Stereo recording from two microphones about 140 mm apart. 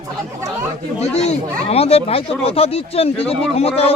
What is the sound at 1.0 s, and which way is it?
Speech, 50° left (ahead or behind).